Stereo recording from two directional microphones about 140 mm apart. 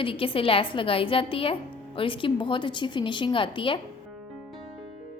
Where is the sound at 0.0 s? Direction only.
40° left (ahead or behind).